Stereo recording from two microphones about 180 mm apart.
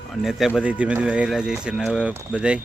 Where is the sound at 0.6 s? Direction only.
5° right (ahead or behind).